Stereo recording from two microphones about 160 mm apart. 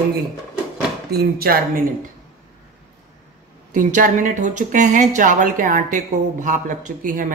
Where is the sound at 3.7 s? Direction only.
55° right (ahead or behind).